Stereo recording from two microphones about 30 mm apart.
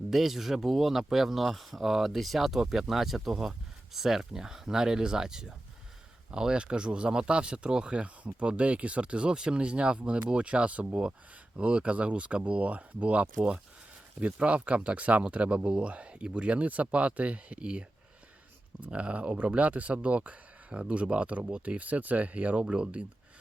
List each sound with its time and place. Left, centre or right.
0.1 s speech: centre; by 7.9 s right
7.9 s speech: right
14.3 s speech: right
16.8 s speech: right
17.2 s speech: right
18.9 s speech: right
21.8 s speech: right
22.6 s speech: right